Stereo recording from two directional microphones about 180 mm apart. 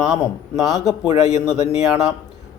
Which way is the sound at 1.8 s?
Centre (ahead or behind).